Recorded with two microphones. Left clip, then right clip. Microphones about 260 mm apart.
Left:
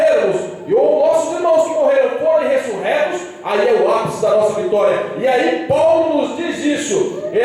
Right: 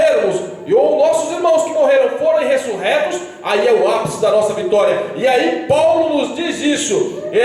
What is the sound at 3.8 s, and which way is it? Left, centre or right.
A man's voice, centre.